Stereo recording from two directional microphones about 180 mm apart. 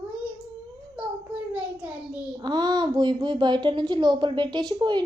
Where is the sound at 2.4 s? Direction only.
25° right (ahead or behind).